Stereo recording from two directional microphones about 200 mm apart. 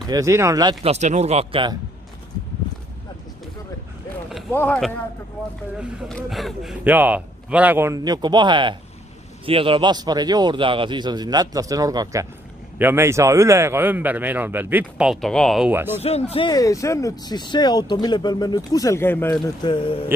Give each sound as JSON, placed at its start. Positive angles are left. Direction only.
{"t": 0.0, "sound": "speech", "side_deg": -15}
{"t": 0.8, "sound": "speech", "side_deg": -35}
{"t": 4.6, "sound": "a man's voice", "side_deg": 5}
{"t": 15.7, "sound": "speech", "side_deg": -10}
{"t": 16.0, "sound": "speech", "side_deg": 30}